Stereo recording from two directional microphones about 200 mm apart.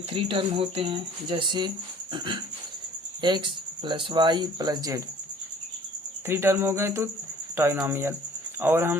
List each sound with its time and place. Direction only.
0.1 s speech: 25° right (ahead or behind)
6.2 s cricket: 10° right (ahead or behind)